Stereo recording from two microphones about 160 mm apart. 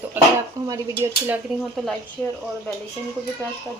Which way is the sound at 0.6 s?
20° right (ahead or behind).